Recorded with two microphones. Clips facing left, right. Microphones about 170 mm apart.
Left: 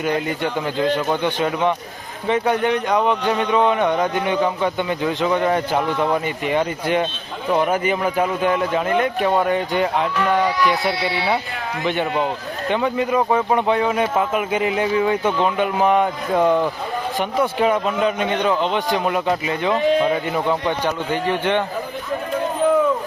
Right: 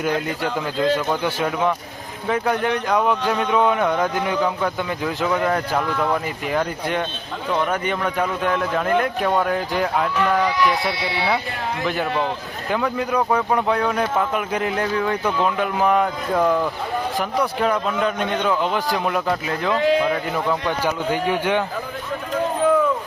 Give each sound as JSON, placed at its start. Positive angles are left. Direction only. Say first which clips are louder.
{"t": 0.0, "sound": "speech", "louder": "left 1 dB", "side_deg": 0}
{"t": 12.6, "sound": "speech", "louder": "left 2 dB", "side_deg": 0}
{"t": 16.4, "sound": "a man's voice", "louder": "left 2 dB", "side_deg": 25}
{"t": 17.6, "sound": "speech", "louder": "left 3 dB", "side_deg": 5}
{"t": 19.7, "sound": "a man's voice", "louder": "left 1 dB", "side_deg": 20}
{"t": 20.8, "sound": "speech", "louder": "even", "side_deg": -10}